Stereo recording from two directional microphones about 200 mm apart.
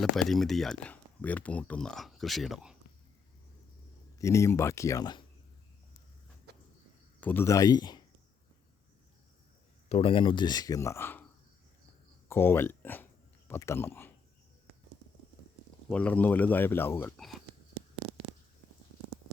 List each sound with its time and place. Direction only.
0.0 s speech: centre (ahead or behind)
4.2 s speech: 15° left (ahead or behind)
6.5 s cricket: 55° right (ahead or behind)
7.2 s speech: 10° left (ahead or behind)
9.9 s speech: 25° left (ahead or behind); by 11.3 s 10° left (ahead or behind)
12.3 s speech: 10° left (ahead or behind)
15.9 s speech: 5° left (ahead or behind)